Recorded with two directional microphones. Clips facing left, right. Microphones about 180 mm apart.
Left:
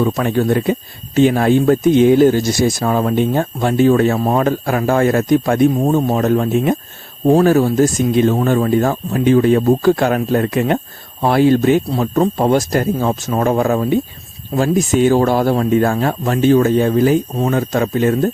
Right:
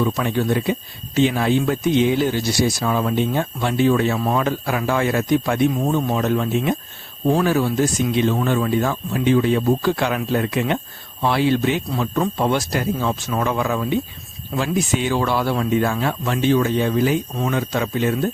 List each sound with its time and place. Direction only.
0.0 s speech: 50° left (ahead or behind)